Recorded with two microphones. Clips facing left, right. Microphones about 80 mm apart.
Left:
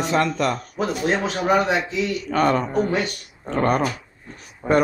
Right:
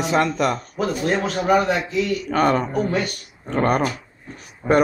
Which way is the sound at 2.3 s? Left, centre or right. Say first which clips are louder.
Even; centre.